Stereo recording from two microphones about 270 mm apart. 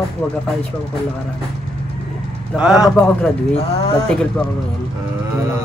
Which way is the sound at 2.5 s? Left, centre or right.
Centre.